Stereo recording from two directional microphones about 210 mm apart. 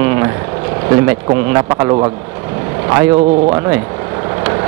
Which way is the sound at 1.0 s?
20° right (ahead or behind).